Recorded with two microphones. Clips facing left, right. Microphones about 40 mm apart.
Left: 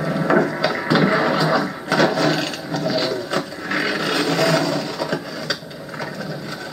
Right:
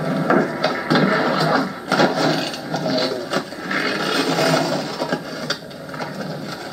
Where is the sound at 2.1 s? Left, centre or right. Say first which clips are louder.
Even; centre.